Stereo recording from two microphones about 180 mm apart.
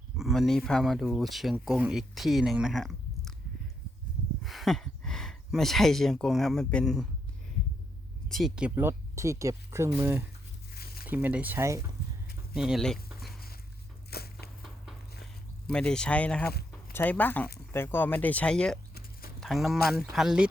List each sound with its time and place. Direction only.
0.2 s speech: centre (ahead or behind)
4.4 s speech: centre (ahead or behind)
8.3 s speech: centre (ahead or behind)
12.5 s speech: 5° right (ahead or behind)
14.1 s a sound: 60° left (ahead or behind)
15.7 s speech: 5° left (ahead or behind)